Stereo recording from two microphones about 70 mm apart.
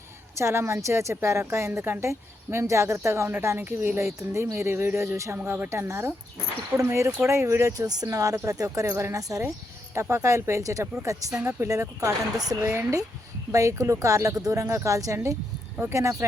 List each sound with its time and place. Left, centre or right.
0.3 s speech: right